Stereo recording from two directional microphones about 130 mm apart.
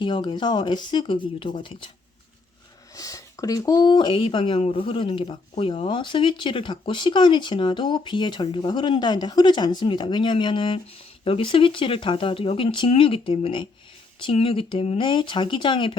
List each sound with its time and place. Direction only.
0.0 s speech: 40° left (ahead or behind)
2.9 s speech: 25° left (ahead or behind)